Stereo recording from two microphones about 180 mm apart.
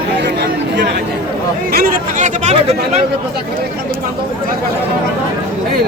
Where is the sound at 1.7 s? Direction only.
55° right (ahead or behind); by 3.0 s 35° right (ahead or behind).